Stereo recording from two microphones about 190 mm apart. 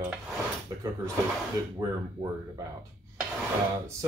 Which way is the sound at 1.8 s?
20° right (ahead or behind).